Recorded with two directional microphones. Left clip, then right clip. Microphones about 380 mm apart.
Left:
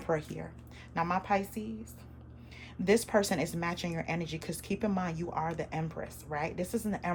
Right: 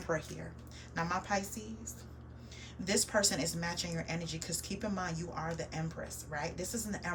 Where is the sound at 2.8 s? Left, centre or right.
Centre.